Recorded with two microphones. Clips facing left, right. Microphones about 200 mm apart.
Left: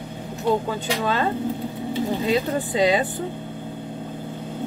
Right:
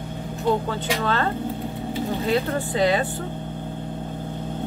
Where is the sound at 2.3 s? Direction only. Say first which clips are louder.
Right 2 dB; 15° left (ahead or behind).